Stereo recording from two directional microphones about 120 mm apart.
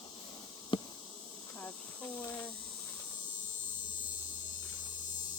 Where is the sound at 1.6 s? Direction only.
15° left (ahead or behind).